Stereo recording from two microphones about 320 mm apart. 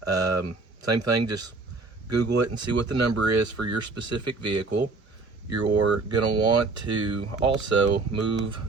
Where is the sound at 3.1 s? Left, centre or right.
Right.